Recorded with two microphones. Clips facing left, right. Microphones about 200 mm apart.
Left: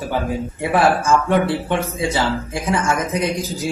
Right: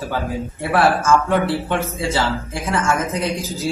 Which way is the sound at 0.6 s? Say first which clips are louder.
Even; 15° left (ahead or behind).